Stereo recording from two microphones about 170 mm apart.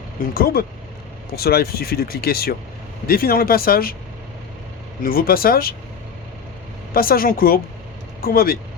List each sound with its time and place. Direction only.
0.3 s speech: 65° left (ahead or behind)
5.0 s speech: 60° left (ahead or behind)
6.9 s speech: 60° left (ahead or behind)